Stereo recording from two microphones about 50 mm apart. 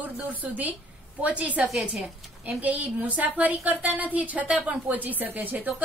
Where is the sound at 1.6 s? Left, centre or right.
Centre.